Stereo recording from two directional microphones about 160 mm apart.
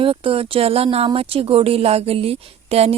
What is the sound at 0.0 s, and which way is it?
Speech, 35° right (ahead or behind).